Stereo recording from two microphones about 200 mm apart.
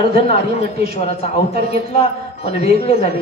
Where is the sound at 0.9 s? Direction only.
30° left (ahead or behind).